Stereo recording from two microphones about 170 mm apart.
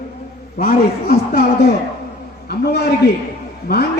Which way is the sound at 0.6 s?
65° left (ahead or behind).